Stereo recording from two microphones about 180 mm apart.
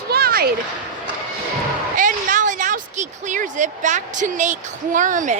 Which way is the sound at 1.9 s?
45° right (ahead or behind).